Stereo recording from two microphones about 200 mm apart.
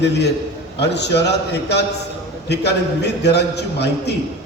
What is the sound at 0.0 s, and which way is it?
A man's voice, 55° left (ahead or behind).